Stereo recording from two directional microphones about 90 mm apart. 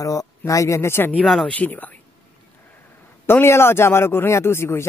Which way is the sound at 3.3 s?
25° left (ahead or behind).